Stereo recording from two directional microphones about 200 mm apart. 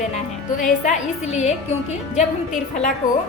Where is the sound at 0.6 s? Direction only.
35° left (ahead or behind).